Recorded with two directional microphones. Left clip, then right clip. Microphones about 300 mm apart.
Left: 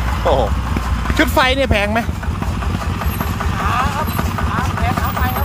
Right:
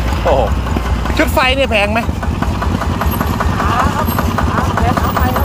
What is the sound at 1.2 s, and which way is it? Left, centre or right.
Speech, centre.